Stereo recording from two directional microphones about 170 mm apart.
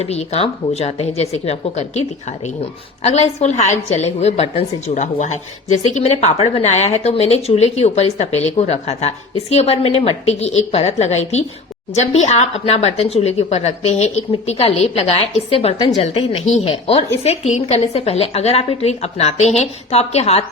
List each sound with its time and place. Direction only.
0.0 s a woman's voice: 40° left (ahead or behind)